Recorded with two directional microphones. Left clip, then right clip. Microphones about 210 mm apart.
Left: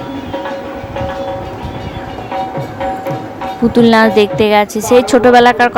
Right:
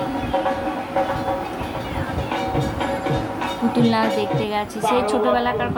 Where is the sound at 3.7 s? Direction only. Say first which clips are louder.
Left 12 dB; 35° left (ahead or behind).